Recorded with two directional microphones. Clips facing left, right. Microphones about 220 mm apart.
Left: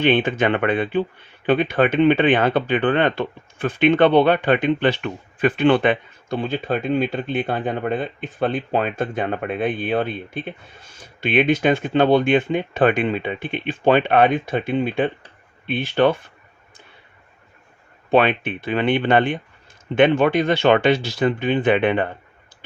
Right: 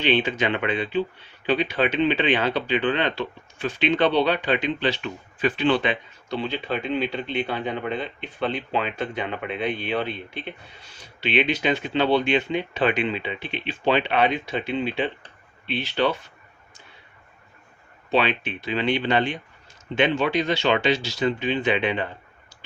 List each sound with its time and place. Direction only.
0.0 s speech: 50° left (ahead or behind)
18.1 s speech: 50° left (ahead or behind)